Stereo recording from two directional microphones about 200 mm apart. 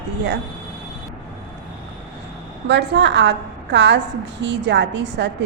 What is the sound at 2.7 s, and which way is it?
A woman's voice, 60° right (ahead or behind).